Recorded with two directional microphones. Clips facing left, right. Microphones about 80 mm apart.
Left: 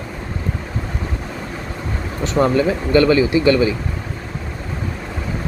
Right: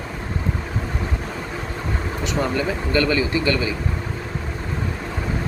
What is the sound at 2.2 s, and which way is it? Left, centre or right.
Speech, left.